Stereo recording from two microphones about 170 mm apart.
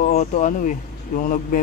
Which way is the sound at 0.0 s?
45° left (ahead or behind).